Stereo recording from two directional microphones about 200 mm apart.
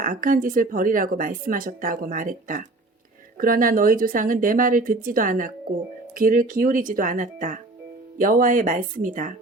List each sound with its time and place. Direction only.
0.0 s speech: 45° right (ahead or behind)